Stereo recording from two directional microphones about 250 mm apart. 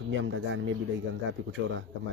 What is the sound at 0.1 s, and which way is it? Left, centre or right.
Speech, right.